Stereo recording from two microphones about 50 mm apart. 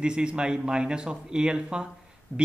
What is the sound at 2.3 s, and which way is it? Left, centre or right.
Speech, left.